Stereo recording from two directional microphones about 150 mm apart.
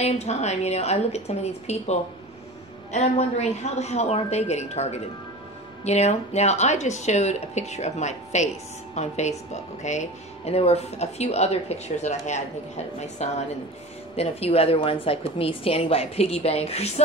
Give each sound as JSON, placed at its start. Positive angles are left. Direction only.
{"t": 0.0, "sound": "a woman's voice", "side_deg": 50}